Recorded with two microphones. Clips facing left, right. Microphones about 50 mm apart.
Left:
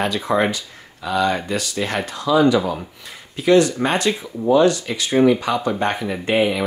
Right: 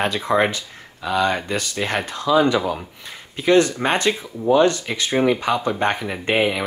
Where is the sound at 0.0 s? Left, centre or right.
Right.